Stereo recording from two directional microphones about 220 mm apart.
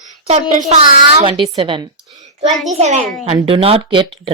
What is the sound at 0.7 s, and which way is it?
A child's voice, 25° right (ahead or behind).